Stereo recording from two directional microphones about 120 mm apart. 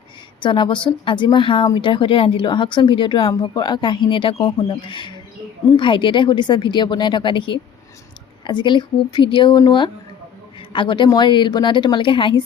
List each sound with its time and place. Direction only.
0.4 s a woman's voice: 40° left (ahead or behind)